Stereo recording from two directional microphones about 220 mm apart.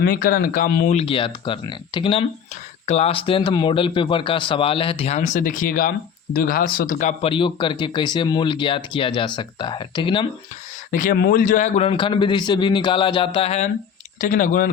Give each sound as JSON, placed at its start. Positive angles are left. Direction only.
{"t": 0.0, "sound": "speech", "side_deg": 40}
{"t": 10.9, "sound": "speech", "side_deg": 35}